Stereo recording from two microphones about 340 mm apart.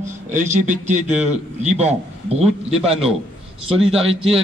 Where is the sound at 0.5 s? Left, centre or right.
Right.